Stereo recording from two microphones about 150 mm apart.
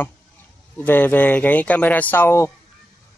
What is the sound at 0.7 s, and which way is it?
Speech, 15° left (ahead or behind).